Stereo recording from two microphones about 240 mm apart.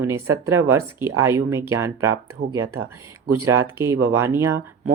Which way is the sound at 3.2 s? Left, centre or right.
Right.